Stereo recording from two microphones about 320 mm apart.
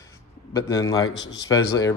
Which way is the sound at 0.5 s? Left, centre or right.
Centre.